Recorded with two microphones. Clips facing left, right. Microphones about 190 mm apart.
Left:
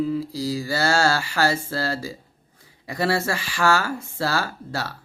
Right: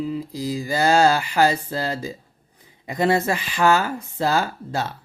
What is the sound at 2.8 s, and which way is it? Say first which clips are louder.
Speech: right 3 dB; 20° right (ahead or behind).